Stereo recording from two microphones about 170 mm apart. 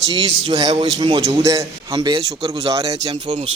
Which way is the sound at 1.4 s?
20° right (ahead or behind).